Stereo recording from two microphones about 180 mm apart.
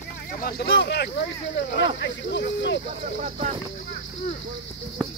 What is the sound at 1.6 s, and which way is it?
Speech, 90° left.